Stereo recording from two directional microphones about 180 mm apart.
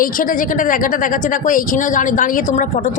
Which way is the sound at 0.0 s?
50° left (ahead or behind).